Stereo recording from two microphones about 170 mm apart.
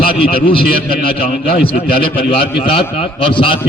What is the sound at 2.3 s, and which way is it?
A man's voice, 30° left (ahead or behind).